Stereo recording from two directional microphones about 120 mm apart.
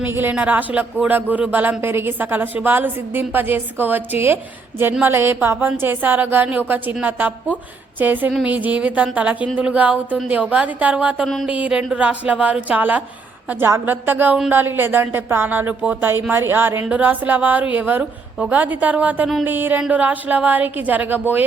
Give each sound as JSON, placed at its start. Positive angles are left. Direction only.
{"t": 0.0, "sound": "speech", "side_deg": -15}